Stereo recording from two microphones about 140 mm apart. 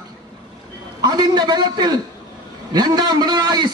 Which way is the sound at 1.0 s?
30° right (ahead or behind).